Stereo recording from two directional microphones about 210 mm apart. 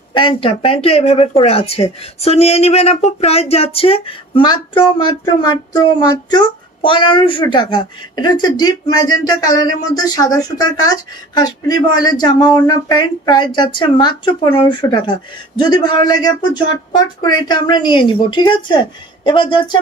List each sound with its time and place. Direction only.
0.1 s speech: 25° left (ahead or behind)